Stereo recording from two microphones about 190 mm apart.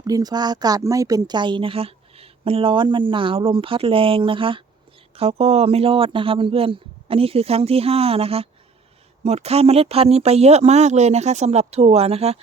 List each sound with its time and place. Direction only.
0.0 s speech: 20° right (ahead or behind)